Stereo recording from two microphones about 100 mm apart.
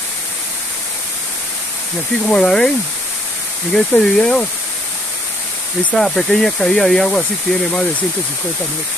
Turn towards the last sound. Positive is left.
turn(degrees=5)  # may be behind; listen again after turning